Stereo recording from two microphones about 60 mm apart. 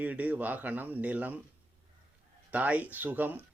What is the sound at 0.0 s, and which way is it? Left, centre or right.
Speech, right.